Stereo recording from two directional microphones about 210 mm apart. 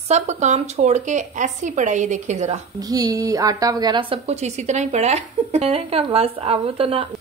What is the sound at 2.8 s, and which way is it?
A woman's voice, 15° right (ahead or behind).